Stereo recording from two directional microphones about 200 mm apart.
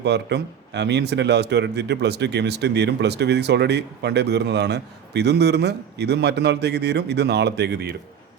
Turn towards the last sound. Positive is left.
turn(degrees=-55)  # may be behind; listen again after turning